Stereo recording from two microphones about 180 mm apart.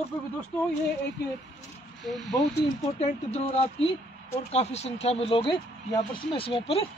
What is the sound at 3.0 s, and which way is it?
Speech, 40° left (ahead or behind).